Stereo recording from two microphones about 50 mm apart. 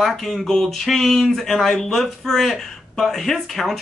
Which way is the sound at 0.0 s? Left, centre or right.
Centre.